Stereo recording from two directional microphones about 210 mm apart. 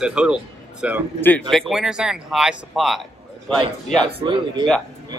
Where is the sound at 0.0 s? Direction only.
5° right (ahead or behind).